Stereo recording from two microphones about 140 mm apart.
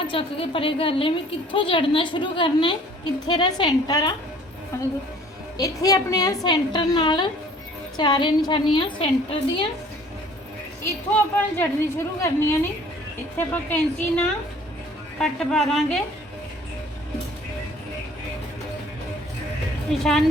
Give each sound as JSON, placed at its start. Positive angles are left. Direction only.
{"t": 0.1, "sound": "a woman's voice", "side_deg": 40}
{"t": 11.3, "sound": "a woman's voice", "side_deg": 15}
{"t": 20.1, "sound": "a woman's voice", "side_deg": 0}